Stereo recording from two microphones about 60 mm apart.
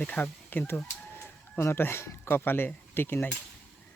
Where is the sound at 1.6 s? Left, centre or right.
Left.